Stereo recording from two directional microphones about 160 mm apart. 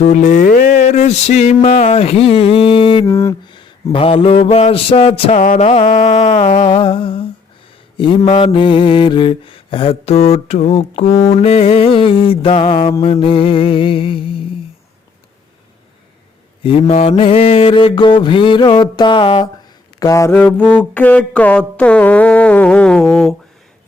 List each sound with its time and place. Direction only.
0.0 s music: 50° left (ahead or behind); by 3.1 s 30° left (ahead or behind)
3.1 s a sound: 20° left (ahead or behind)
3.9 s mantra: 35° left (ahead or behind)
6.7 s mantra: 35° left (ahead or behind)
16.6 s mantra: 40° left (ahead or behind)
20.0 s mantra: 20° left (ahead or behind); by 23.3 s 5° left (ahead or behind)